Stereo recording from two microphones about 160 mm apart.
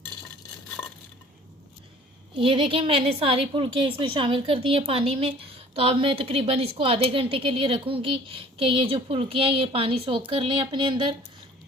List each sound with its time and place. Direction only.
2.3 s a woman's voice: 35° right (ahead or behind)